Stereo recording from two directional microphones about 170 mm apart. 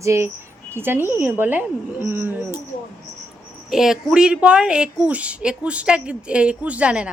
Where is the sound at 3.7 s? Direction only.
5° right (ahead or behind).